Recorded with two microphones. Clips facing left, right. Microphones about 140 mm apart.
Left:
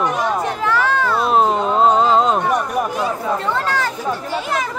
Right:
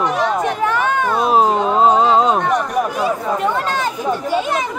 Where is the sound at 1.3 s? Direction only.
Centre (ahead or behind).